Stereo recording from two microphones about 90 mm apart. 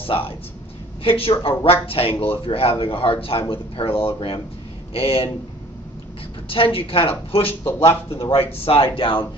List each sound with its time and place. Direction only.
0.0 s a woman's voice: 90° left
6.5 s a woman's voice: 90° left
7.6 s speech: 30° left (ahead or behind)
8.2 s a woman's voice: 90° left